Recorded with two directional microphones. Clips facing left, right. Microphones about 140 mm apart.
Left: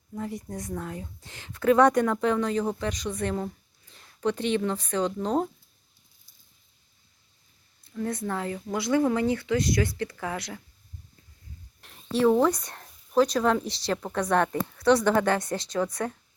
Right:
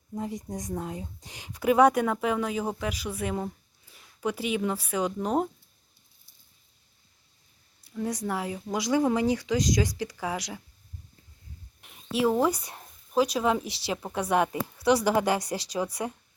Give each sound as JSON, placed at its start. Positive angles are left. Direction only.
{"t": 0.1, "sound": "speech", "side_deg": -20}
{"t": 7.9, "sound": "speech", "side_deg": -15}
{"t": 11.8, "sound": "a sound", "side_deg": -5}
{"t": 13.1, "sound": "speech", "side_deg": -10}